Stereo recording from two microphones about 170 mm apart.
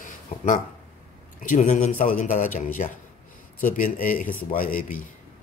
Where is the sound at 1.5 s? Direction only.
50° left (ahead or behind).